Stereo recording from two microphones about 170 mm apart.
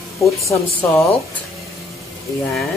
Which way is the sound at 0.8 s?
10° left (ahead or behind).